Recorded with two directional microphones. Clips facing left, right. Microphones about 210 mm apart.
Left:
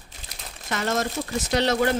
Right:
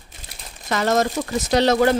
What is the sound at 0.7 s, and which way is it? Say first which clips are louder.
Speech: right 6 dB; 90° right.